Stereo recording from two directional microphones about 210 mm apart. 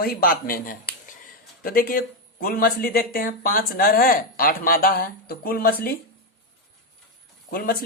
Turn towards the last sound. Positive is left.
turn(degrees=40)  # may be behind; listen again after turning